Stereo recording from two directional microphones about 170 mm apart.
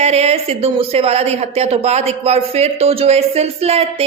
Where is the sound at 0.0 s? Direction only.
40° right (ahead or behind).